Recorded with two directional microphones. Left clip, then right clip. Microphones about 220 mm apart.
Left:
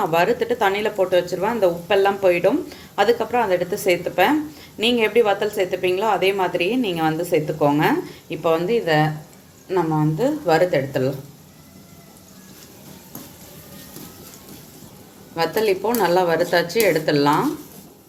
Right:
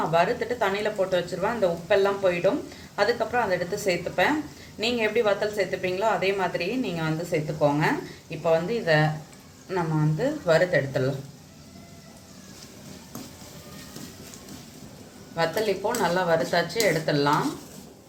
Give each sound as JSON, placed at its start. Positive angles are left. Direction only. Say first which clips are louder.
{"t": 0.1, "sound": "a woman's voice", "louder": "left 5 dB", "side_deg": 40}
{"t": 9.7, "sound": "speech", "louder": "left 7 dB", "side_deg": 20}
{"t": 10.2, "sound": "a woman's voice", "louder": "left 3 dB", "side_deg": 35}
{"t": 15.4, "sound": "a woman's voice", "louder": "left 5 dB", "side_deg": 40}